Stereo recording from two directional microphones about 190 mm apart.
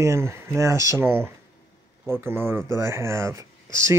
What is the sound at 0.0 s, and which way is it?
Speech, 15° right (ahead or behind).